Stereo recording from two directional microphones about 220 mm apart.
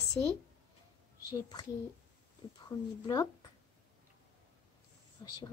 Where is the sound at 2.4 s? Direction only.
25° left (ahead or behind).